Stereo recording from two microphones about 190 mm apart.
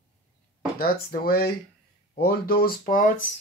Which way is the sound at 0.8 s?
55° left (ahead or behind).